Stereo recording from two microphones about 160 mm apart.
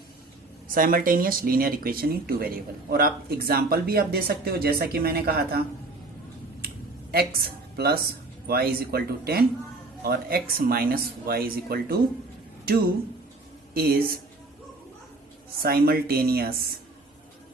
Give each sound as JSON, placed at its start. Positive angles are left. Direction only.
{"t": 0.7, "sound": "speech", "side_deg": -60}
{"t": 7.1, "sound": "a woman's voice", "side_deg": -75}
{"t": 13.7, "sound": "speech", "side_deg": -75}
{"t": 15.6, "sound": "speech", "side_deg": -70}